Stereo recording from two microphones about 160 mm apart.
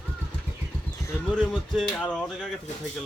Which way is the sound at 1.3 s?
5° left (ahead or behind).